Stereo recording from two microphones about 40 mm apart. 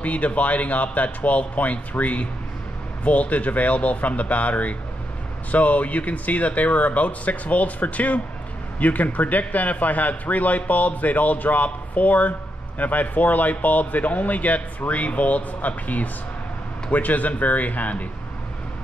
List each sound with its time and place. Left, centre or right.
0.0 s speech: left